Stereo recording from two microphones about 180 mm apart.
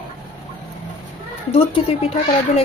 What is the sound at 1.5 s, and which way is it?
Speech, 35° left (ahead or behind).